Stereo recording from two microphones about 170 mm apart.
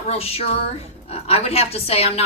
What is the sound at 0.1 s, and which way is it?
A woman's voice, 35° left (ahead or behind).